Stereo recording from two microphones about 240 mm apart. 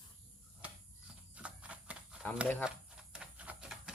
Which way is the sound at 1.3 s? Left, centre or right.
Centre.